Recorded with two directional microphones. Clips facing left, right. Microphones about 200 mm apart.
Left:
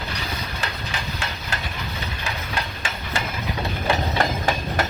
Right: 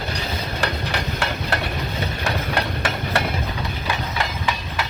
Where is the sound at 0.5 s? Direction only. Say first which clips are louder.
Right 6 dB; 60° right (ahead or behind).